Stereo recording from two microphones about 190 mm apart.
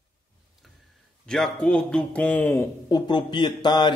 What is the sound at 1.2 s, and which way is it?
Speech, 5° left (ahead or behind).